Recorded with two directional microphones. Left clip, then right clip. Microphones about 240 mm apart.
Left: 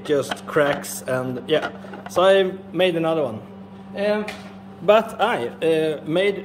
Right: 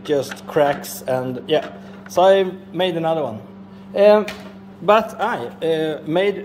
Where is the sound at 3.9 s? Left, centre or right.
Centre.